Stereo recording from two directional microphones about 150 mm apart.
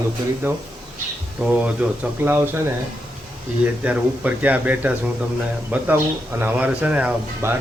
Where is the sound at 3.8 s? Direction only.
10° right (ahead or behind).